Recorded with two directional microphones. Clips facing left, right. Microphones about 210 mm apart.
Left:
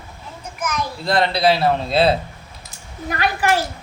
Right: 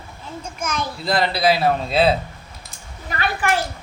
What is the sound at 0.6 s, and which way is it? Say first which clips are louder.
Speech: left 2 dB; 25° right (ahead or behind).